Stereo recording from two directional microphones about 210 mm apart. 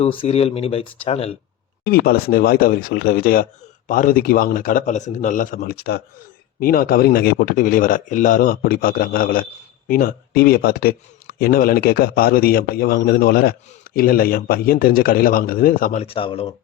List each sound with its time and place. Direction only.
0.0 s speech: 25° left (ahead or behind)
1.8 s a man's voice: 45° left (ahead or behind)
16.0 s speech: 25° left (ahead or behind)